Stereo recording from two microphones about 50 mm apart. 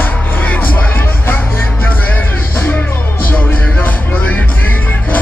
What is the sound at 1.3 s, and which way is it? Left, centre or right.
Music, left.